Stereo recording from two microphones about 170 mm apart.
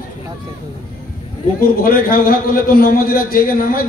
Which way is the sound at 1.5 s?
60° left (ahead or behind).